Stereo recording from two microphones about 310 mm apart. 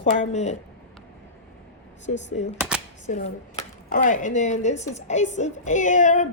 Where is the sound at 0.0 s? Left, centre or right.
Left.